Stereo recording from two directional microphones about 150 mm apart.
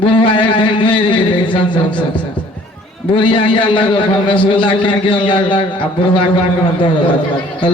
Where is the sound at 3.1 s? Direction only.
35° left (ahead or behind).